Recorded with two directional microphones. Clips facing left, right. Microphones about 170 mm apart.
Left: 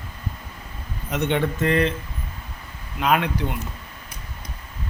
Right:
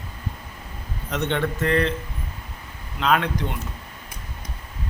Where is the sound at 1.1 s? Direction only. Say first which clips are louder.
Left 2 dB; 10° left (ahead or behind).